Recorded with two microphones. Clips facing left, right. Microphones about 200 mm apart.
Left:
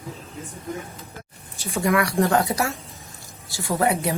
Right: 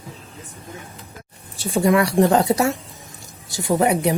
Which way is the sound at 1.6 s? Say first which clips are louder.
Right 5 dB; 30° right (ahead or behind).